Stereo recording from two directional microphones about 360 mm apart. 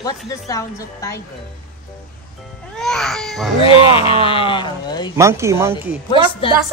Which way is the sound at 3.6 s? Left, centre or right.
Centre.